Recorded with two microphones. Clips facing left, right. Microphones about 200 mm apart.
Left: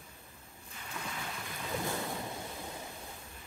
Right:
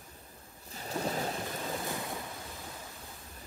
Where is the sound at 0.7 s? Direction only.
35° right (ahead or behind).